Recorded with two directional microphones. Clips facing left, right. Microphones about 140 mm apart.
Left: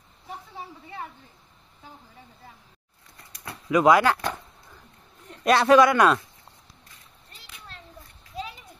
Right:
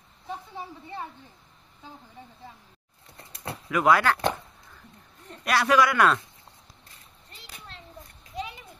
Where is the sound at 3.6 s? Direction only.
20° left (ahead or behind).